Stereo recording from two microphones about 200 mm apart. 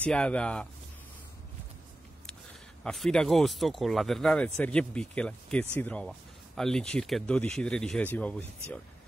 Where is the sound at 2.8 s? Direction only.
Centre (ahead or behind).